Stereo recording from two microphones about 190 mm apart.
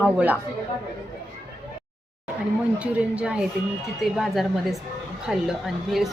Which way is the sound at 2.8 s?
5° right (ahead or behind).